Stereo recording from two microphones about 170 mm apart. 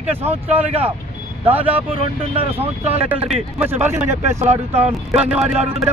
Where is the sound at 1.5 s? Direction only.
35° right (ahead or behind).